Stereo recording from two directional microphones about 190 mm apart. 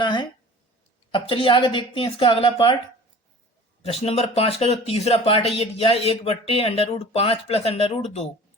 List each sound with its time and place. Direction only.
0.0 s a sound: 25° left (ahead or behind)
1.1 s a woman's voice: 25° left (ahead or behind)
3.8 s speech: 30° left (ahead or behind)